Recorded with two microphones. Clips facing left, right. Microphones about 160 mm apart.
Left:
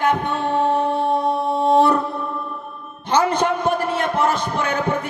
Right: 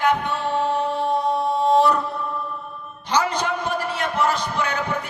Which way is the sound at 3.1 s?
55° left (ahead or behind).